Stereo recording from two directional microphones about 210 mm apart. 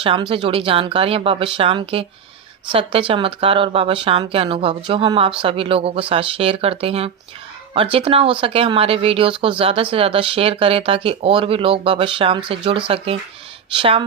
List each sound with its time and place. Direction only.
0.0 s speech: 25° right (ahead or behind)